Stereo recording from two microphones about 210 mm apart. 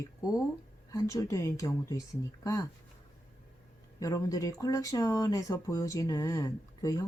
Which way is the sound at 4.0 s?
15° left (ahead or behind).